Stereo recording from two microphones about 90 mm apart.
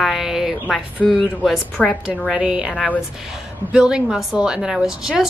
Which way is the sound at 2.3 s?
5° right (ahead or behind).